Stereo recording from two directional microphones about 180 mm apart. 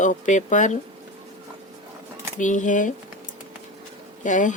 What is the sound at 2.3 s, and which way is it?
Speech, 45° left (ahead or behind).